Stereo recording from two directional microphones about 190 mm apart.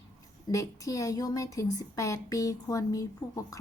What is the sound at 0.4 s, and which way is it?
Speech, 15° left (ahead or behind).